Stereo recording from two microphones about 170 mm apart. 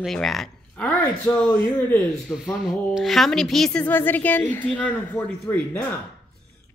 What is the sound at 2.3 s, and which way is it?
A woman's voice, centre (ahead or behind).